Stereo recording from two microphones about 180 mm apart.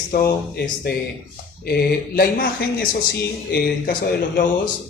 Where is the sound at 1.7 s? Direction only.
55° left (ahead or behind).